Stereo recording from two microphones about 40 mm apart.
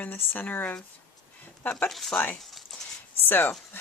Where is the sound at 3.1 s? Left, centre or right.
Left.